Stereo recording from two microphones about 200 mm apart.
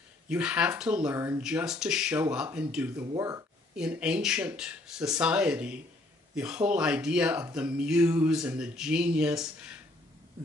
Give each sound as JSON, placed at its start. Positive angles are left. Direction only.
{"t": 0.3, "sound": "speech", "side_deg": -5}
{"t": 3.7, "sound": "speech", "side_deg": -5}